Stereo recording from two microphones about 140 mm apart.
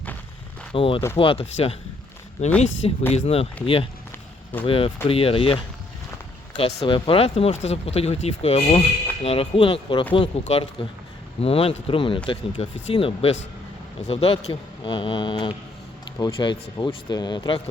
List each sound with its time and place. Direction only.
0.7 s speech: 40° left (ahead or behind)
3.1 s speech: 45° left (ahead or behind)
6.6 s speech: 45° left (ahead or behind)